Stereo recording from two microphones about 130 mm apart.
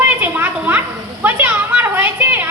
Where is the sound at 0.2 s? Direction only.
15° right (ahead or behind).